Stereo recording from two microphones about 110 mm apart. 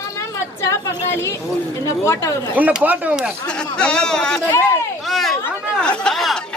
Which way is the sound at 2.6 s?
15° right (ahead or behind).